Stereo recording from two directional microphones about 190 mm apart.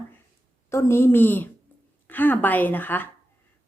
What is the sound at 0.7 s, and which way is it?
A woman's voice, 15° left (ahead or behind).